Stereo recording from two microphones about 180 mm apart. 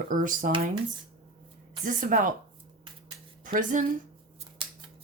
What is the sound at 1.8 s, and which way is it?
Speech, 50° right (ahead or behind).